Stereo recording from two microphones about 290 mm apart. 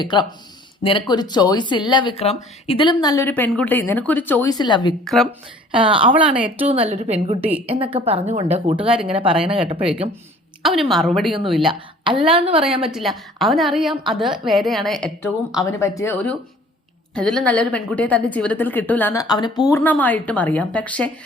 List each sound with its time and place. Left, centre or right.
0.0 s speech: centre
5.0 s a woman's voice: centre
5.7 s a woman's voice: centre
8.9 s a woman's voice: centre
9.6 s a woman's voice: centre
10.6 s a woman's voice: centre
12.3 s a woman's voice: centre
12.8 s a woman's voice: centre